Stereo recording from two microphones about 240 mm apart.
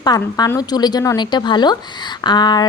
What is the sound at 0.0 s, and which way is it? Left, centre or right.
Speech, centre.